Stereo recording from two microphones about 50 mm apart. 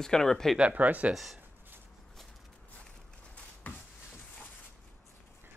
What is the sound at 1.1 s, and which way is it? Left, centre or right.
Speech, centre.